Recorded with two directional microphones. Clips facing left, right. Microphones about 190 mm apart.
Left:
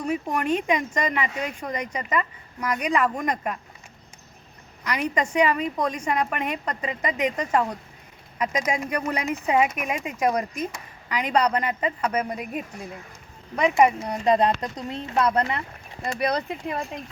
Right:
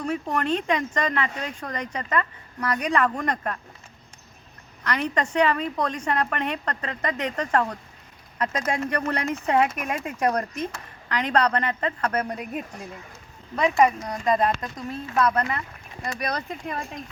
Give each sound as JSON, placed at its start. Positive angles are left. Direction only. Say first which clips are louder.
{"t": 0.0, "sound": "speech", "louder": "left 1 dB", "side_deg": 10}
{"t": 4.8, "sound": "speech", "louder": "even", "side_deg": 10}
{"t": 13.6, "sound": "speech", "louder": "left 1 dB", "side_deg": 15}